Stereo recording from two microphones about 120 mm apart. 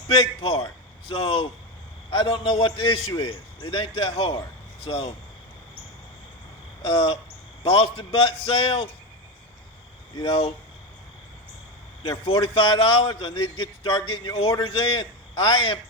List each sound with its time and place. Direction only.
0.1 s a man's voice: 50° left (ahead or behind)
6.8 s a man's voice: 45° left (ahead or behind)
10.2 s a man's voice: 50° left (ahead or behind)
12.2 s a man's voice: 45° left (ahead or behind)